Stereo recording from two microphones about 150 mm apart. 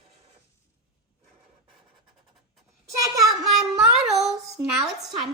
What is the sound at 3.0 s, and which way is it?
Speech, 25° right (ahead or behind).